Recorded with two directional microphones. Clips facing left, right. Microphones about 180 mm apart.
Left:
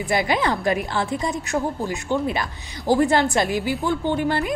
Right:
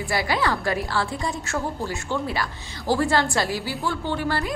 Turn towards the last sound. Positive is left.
turn(degrees=20)  # may be behind; listen again after turning